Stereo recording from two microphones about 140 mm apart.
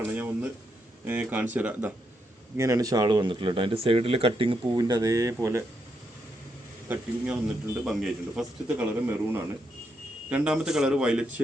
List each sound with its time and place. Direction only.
0.0 s a sound: 10° right (ahead or behind)
1.0 s a man's voice: 10° right (ahead or behind)
2.6 s speech: 20° right (ahead or behind)
4.8 s speech: 25° right (ahead or behind)
6.8 s a man's voice: 10° right (ahead or behind)
10.2 s speech: 5° right (ahead or behind)